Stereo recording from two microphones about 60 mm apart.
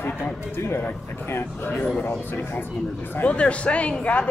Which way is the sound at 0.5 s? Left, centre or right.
Left.